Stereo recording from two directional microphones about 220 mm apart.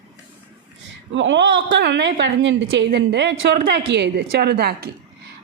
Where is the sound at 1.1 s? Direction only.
55° right (ahead or behind).